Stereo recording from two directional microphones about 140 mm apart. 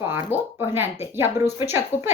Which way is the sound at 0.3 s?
15° right (ahead or behind).